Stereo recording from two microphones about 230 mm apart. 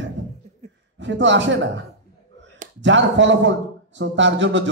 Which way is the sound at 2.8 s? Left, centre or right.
Right.